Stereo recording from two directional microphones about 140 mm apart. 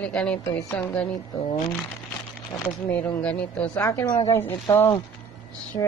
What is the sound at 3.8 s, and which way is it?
A woman's voice, 25° left (ahead or behind).